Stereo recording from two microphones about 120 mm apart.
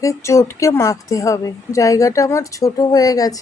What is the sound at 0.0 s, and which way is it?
Speech, 25° left (ahead or behind).